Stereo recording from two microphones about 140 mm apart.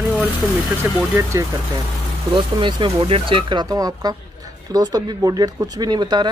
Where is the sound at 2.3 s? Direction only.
35° right (ahead or behind).